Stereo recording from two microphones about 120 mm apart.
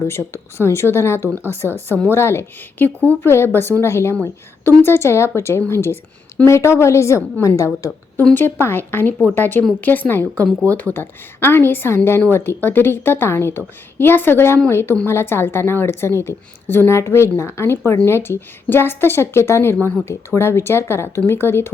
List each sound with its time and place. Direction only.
0.1 s a woman's voice: 20° left (ahead or behind)
1.6 s speech: 20° right (ahead or behind)
2.0 s a woman's voice: 20° left (ahead or behind)
7.9 s a woman's voice: 10° left (ahead or behind)